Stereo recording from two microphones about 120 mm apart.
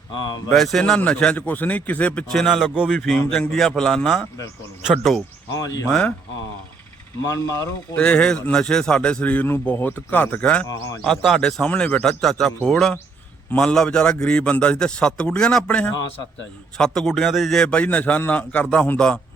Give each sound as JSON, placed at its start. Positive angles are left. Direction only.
{"t": 0.5, "sound": "a man's voice", "side_deg": 0}
{"t": 7.3, "sound": "speech", "side_deg": 30}
{"t": 7.9, "sound": "a man's voice", "side_deg": 10}